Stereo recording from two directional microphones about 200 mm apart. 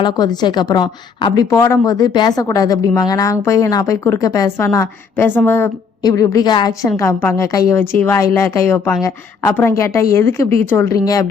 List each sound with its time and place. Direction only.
0.0 s a woman's voice: 20° left (ahead or behind)